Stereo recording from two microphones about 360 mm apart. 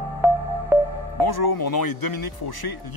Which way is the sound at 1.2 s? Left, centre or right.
Left.